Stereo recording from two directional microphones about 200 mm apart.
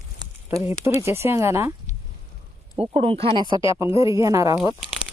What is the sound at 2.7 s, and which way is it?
Speech, 25° right (ahead or behind).